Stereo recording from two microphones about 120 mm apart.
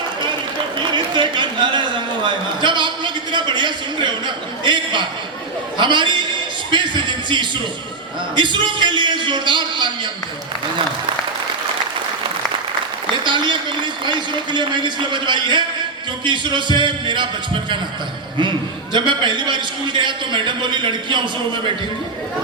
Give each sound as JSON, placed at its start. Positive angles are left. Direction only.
{"t": 0.9, "sound": "a sound", "side_deg": -40}
{"t": 5.7, "sound": "speech", "side_deg": -40}
{"t": 13.2, "sound": "speech", "side_deg": -40}
{"t": 18.9, "sound": "speech", "side_deg": -40}